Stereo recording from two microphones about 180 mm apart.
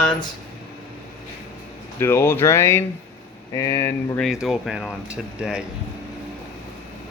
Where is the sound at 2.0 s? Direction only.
15° left (ahead or behind).